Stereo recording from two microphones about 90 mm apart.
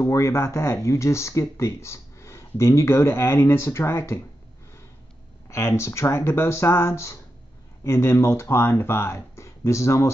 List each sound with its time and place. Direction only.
0.0 s speech: 35° left (ahead or behind)
5.5 s speech: 30° left (ahead or behind)